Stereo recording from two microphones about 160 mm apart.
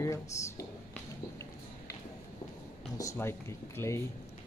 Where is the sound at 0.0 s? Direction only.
20° left (ahead or behind).